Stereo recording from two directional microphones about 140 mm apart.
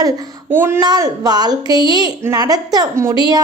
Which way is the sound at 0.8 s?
30° right (ahead or behind).